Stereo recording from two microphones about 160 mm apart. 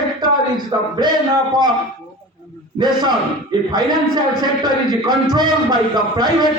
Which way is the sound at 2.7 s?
25° right (ahead or behind).